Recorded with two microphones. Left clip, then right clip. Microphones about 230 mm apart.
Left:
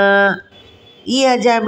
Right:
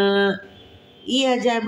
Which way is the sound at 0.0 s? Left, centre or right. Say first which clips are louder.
Left 7 dB; centre.